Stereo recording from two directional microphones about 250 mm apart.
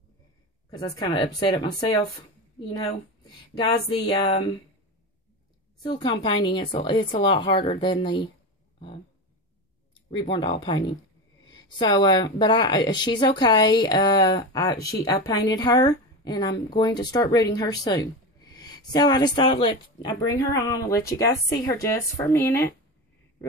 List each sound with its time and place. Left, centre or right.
0.7 s speech: centre
3.3 s speech: centre
5.8 s a woman's voice: centre
8.7 s a sound: left
10.1 s speech: centre